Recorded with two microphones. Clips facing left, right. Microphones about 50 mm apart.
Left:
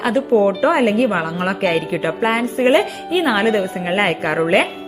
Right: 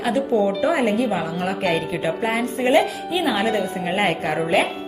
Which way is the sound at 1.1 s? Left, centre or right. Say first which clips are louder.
Left 4 dB; left.